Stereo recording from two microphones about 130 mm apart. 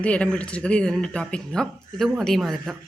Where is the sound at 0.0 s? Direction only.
10° left (ahead or behind).